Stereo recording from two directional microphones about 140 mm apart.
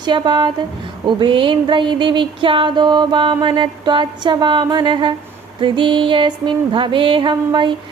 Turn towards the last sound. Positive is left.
turn(degrees=-35)  # may be behind; listen again after turning